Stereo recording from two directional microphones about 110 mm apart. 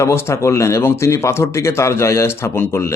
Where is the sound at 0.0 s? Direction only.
25° left (ahead or behind).